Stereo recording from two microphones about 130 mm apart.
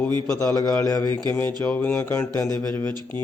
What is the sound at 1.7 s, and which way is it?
Speech, 10° left (ahead or behind).